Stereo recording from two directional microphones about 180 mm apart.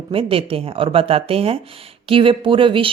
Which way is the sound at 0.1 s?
30° right (ahead or behind).